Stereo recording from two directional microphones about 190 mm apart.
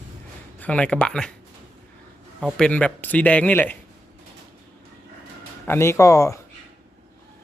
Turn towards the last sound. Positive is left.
turn(degrees=15)  # may be behind; listen again after turning